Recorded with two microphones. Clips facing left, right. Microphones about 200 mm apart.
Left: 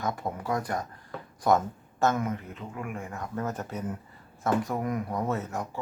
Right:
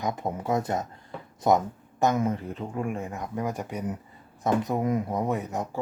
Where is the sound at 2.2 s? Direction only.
30° right (ahead or behind); by 5.6 s 15° right (ahead or behind).